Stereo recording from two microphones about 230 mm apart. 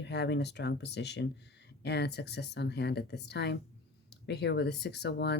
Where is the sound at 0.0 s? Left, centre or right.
Left.